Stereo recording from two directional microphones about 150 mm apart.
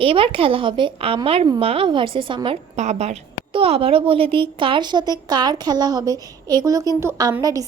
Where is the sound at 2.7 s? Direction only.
50° right (ahead or behind).